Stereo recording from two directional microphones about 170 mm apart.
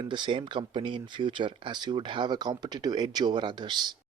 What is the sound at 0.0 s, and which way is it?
Speech, 25° right (ahead or behind).